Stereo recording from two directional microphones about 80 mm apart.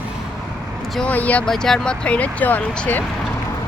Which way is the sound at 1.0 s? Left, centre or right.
Centre.